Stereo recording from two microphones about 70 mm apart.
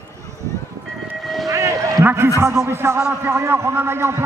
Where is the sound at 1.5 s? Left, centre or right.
Right.